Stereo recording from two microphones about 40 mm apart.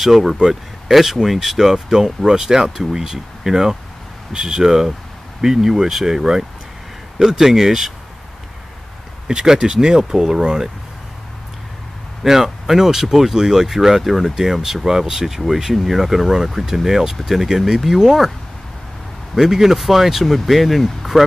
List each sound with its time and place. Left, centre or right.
0.0 s speech: centre
9.3 s speech: centre
12.2 s speech: centre
19.3 s speech: centre